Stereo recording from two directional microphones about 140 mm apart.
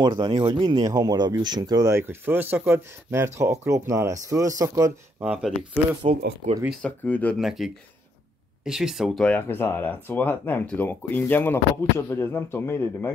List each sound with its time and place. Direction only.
0.0 s speech: 30° right (ahead or behind)
5.2 s speech: 5° right (ahead or behind)
5.6 s speech: 45° right (ahead or behind)
6.8 s speech: 10° left (ahead or behind)
7.3 s speech: centre (ahead or behind); by 13.1 s 15° left (ahead or behind)